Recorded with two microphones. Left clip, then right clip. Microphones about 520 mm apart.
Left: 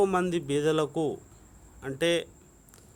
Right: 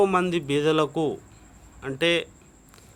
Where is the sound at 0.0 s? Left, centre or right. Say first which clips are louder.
Right 4 dB; left.